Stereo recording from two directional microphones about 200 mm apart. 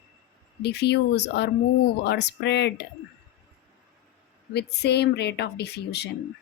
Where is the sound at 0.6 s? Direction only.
55° left (ahead or behind).